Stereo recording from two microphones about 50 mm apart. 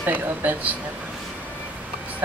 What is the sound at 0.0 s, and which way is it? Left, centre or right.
Speech, right.